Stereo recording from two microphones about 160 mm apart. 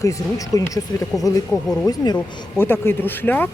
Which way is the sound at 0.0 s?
20° left (ahead or behind).